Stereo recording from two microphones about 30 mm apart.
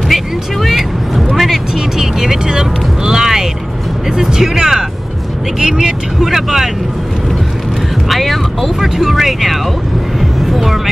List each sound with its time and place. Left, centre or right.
0.1 s vehicle: centre
2.4 s vehicle: right
4.2 s speech: centre
6.2 s speech: centre
8.1 s music: centre
8.8 s speech: centre
10.4 s music: centre